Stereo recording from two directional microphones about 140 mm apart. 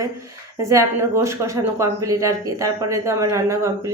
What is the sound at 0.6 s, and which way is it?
A woman's voice, 20° right (ahead or behind).